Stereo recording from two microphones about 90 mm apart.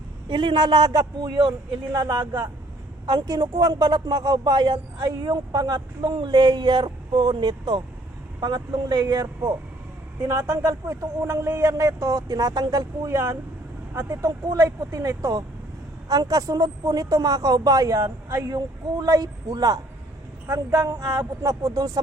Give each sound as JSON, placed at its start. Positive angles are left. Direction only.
{"t": 0.3, "sound": "a man's voice", "side_deg": -60}
{"t": 20.5, "sound": "a man's voice", "side_deg": -35}